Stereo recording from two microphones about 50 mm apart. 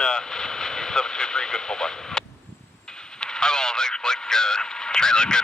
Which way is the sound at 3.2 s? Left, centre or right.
Centre.